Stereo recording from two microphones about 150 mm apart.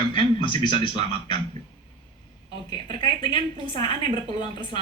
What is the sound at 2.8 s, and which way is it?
A man's voice, 30° left (ahead or behind).